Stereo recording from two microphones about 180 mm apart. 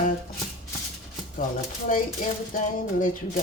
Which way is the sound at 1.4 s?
50° left (ahead or behind).